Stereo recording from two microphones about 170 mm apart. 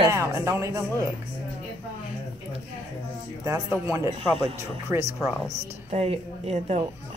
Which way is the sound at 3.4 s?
15° right (ahead or behind).